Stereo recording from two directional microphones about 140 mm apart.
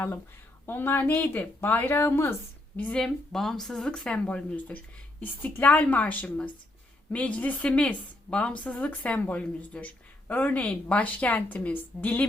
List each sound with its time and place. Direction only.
0.6 s a woman's voice: 15° left (ahead or behind)